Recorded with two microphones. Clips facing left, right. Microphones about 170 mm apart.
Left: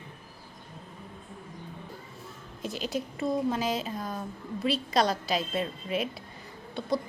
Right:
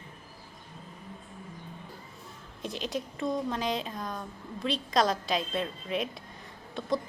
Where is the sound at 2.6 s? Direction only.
Centre (ahead or behind).